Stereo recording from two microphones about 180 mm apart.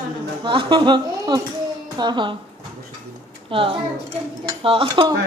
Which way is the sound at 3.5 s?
30° right (ahead or behind).